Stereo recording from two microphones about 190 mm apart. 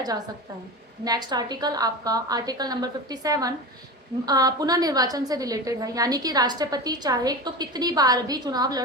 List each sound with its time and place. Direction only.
1.0 s a woman's voice: 20° right (ahead or behind)